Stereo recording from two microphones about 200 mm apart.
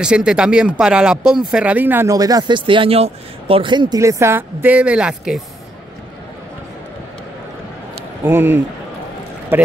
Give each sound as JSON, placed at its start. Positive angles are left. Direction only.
{"t": 0.0, "sound": "speech", "side_deg": -5}
{"t": 8.2, "sound": "speech", "side_deg": -10}